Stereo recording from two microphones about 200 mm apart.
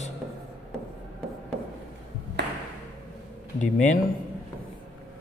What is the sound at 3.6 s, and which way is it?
Speech, 40° left (ahead or behind).